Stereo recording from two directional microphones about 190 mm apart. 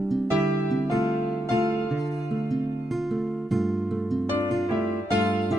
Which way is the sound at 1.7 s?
Centre (ahead or behind).